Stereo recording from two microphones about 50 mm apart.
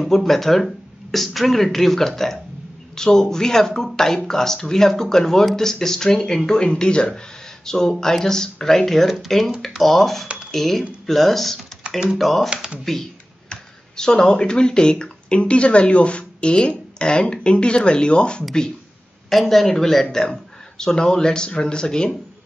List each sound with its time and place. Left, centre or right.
0.0 s speech: centre
19.2 s speech: centre